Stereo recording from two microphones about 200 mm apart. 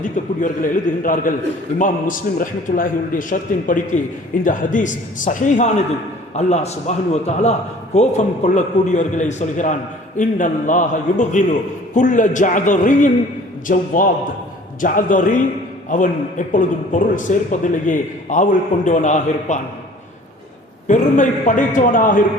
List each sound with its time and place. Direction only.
0.0 s a man's voice: 40° left (ahead or behind)
20.8 s a man's voice: 40° left (ahead or behind)